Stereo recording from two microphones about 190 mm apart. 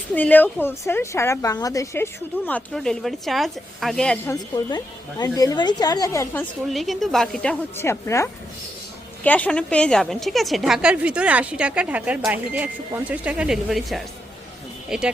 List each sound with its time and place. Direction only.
0.1 s a woman's voice: 10° left (ahead or behind)
2.5 s a woman's voice: 5° left (ahead or behind)
4.6 s a woman's voice: 20° left (ahead or behind)
6.7 s a woman's voice: centre (ahead or behind)
7.8 s a woman's voice: 15° left (ahead or behind); by 15.1 s 5° right (ahead or behind)